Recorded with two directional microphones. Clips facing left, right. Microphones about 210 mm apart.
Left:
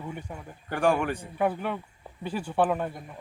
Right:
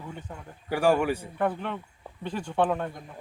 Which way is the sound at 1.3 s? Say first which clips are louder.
Left 1 dB; 10° left (ahead or behind).